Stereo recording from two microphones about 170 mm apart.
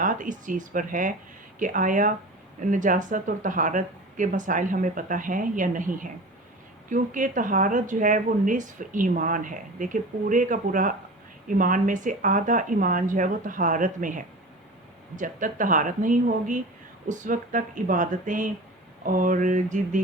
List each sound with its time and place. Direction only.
0.0 s speech: 50° right (ahead or behind)